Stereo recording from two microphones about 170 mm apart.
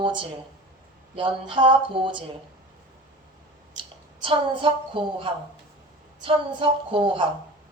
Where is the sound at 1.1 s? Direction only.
30° right (ahead or behind).